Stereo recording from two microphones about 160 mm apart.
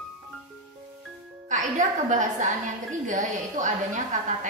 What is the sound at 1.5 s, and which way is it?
A woman's voice, 50° right (ahead or behind).